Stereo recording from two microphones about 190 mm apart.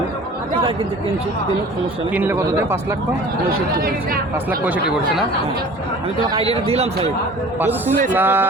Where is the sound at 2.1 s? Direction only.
10° right (ahead or behind).